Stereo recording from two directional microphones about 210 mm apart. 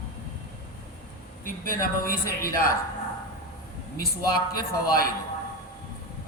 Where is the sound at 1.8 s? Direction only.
45° left (ahead or behind).